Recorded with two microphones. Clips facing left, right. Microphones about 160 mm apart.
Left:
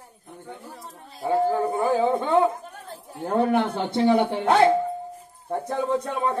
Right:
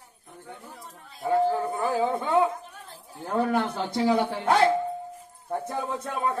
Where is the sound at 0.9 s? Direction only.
35° left (ahead or behind).